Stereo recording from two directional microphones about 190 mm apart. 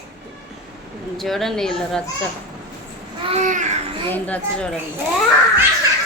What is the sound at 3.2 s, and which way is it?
Babbling, 40° right (ahead or behind).